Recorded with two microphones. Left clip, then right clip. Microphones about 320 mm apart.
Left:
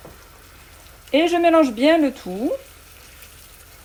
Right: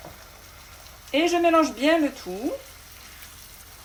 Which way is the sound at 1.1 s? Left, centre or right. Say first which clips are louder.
Left 4 dB; left.